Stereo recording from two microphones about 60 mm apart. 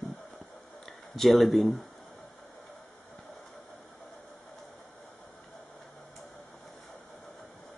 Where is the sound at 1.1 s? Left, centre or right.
Centre.